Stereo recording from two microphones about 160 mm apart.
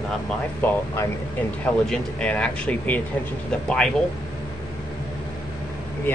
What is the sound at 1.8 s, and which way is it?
Speech, 5° left (ahead or behind).